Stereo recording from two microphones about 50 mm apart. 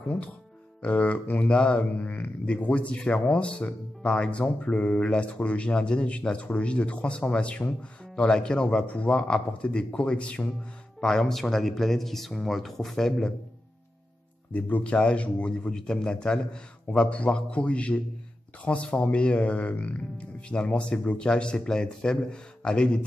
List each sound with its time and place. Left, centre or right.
0.8 s speech: left
11.0 s speech: centre
14.5 s speech: left